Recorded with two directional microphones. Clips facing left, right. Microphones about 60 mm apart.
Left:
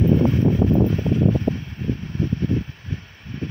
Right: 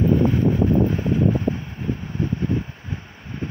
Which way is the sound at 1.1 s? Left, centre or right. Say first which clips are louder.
Even; centre.